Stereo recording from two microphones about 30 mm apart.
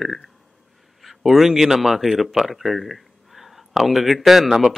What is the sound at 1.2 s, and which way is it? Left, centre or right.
A man's voice, centre.